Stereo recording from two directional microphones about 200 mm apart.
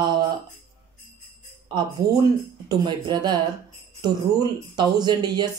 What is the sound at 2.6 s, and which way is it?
Speech, 20° right (ahead or behind).